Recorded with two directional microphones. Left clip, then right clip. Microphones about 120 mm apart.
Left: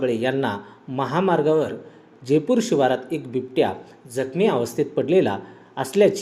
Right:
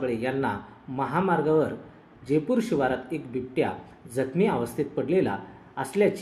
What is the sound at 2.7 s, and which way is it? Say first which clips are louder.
Speech: left 6 dB; 50° left (ahead or behind).